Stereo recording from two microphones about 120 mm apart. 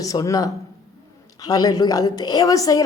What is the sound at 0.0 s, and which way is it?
A woman's voice, 30° left (ahead or behind).